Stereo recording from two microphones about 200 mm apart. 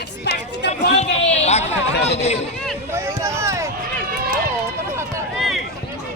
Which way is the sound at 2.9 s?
15° right (ahead or behind).